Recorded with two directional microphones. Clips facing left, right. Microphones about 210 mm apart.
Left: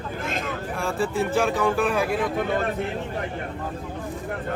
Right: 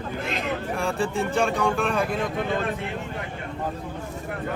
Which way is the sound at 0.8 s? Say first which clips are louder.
Left 3 dB; centre (ahead or behind).